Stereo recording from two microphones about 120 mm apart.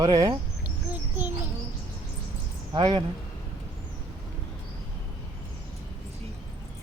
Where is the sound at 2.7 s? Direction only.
40° right (ahead or behind).